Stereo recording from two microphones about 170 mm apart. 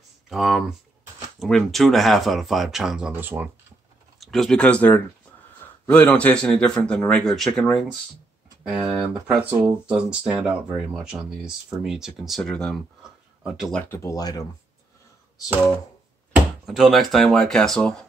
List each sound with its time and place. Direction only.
0.3 s speech: centre (ahead or behind)
4.2 s speech: centre (ahead or behind)
13.9 s speech: 20° left (ahead or behind)
16.6 s speech: centre (ahead or behind)